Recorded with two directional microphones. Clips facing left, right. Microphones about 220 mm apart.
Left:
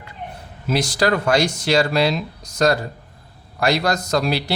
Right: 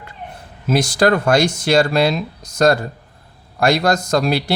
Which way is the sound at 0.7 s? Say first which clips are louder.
Right 4 dB; 50° right (ahead or behind).